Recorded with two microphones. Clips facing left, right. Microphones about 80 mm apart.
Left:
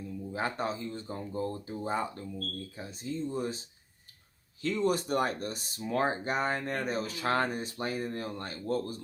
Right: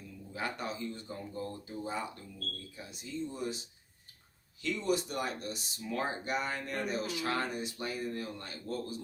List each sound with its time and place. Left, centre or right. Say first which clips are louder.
0.3 s speech: left 4 dB; left